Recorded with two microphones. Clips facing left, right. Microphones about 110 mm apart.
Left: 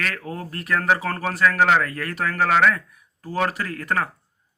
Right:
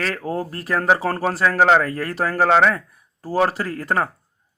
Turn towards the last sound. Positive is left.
turn(degrees=-30)  # may be behind; listen again after turning